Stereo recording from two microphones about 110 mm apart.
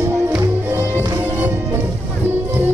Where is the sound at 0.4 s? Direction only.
25° right (ahead or behind).